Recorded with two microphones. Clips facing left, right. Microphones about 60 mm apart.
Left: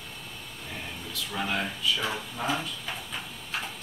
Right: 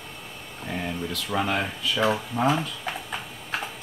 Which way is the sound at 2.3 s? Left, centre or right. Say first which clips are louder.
Right 7 dB; right.